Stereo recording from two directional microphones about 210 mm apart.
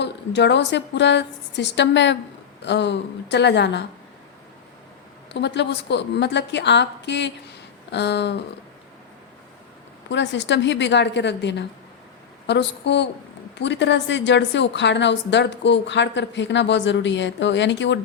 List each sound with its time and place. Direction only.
0.0 s a woman's voice: 55° left (ahead or behind)
5.3 s a woman's voice: 55° left (ahead or behind)
7.9 s a sound: 55° left (ahead or behind)
10.1 s a woman's voice: 60° left (ahead or behind)